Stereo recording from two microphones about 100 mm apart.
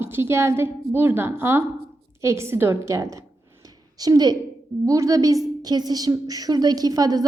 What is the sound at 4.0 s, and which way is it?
A woman's voice, 40° right (ahead or behind).